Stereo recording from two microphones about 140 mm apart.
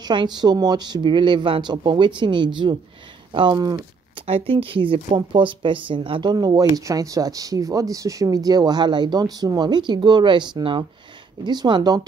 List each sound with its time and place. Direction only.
0.0 s speech: 35° right (ahead or behind)